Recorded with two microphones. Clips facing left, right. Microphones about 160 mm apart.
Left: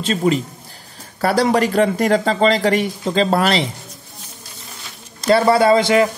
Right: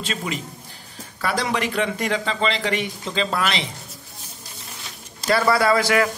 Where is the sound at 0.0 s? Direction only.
35° left (ahead or behind).